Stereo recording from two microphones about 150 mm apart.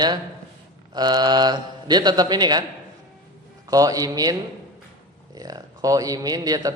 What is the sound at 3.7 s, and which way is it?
Speech, 25° right (ahead or behind).